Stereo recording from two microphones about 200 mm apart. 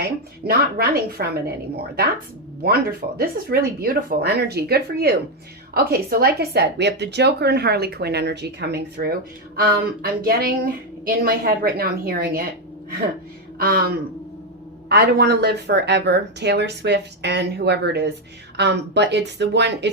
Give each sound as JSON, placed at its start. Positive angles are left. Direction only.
{"t": 0.4, "sound": "speech", "side_deg": -50}
{"t": 3.2, "sound": "speech", "side_deg": -50}
{"t": 13.6, "sound": "speech", "side_deg": -50}